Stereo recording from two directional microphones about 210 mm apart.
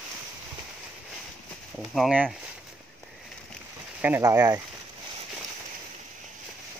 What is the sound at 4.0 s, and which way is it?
Speech, 10° right (ahead or behind).